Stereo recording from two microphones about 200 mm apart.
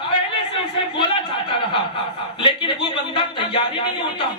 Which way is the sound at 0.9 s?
25° left (ahead or behind).